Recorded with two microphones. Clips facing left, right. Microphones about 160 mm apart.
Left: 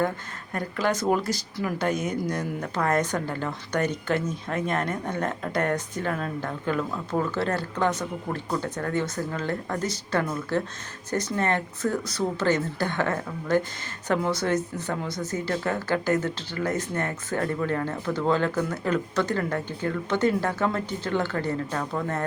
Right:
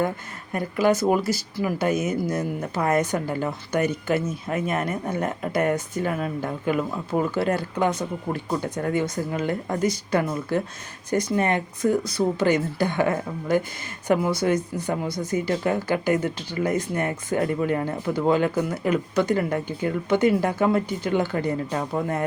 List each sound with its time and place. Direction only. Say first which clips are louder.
0.5 s speech: right 5 dB; 10° right (ahead or behind)